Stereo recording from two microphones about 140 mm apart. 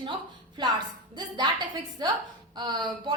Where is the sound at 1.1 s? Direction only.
30° right (ahead or behind).